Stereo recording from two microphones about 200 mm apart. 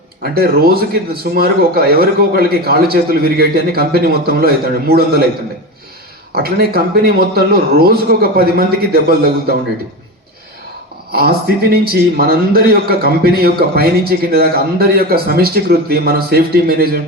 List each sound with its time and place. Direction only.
0.2 s a man's voice: 50° right (ahead or behind)
6.3 s a man's voice: 50° right (ahead or behind)
11.1 s a man's voice: 50° right (ahead or behind)